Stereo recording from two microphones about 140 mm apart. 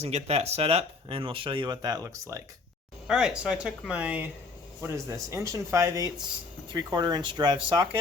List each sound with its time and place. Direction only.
0.0 s speech: 50° right (ahead or behind); by 2.4 s 20° right (ahead or behind)
3.1 s speech: 5° right (ahead or behind)
4.8 s speech: 20° right (ahead or behind)